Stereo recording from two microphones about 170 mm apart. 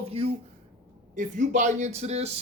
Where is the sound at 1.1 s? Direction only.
50° right (ahead or behind).